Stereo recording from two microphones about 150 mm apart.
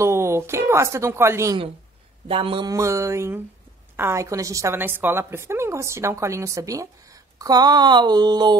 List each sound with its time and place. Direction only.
0.0 s speech: 20° right (ahead or behind)
2.2 s speech: 35° right (ahead or behind)
2.7 s a woman's voice: 20° right (ahead or behind)